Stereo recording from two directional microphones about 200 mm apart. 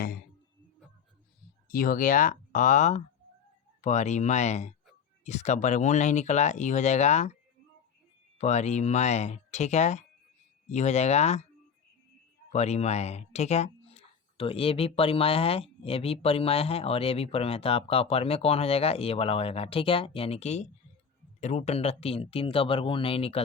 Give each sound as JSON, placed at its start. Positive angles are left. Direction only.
{"t": 1.6, "sound": "speech", "side_deg": 45}
{"t": 8.4, "sound": "speech", "side_deg": 35}
{"t": 12.5, "sound": "speech", "side_deg": 35}